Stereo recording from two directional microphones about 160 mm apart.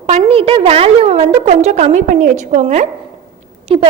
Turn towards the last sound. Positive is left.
turn(degrees=-35)  # may be behind; listen again after turning